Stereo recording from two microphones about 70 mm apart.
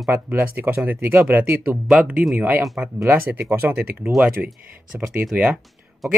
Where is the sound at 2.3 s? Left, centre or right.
Right.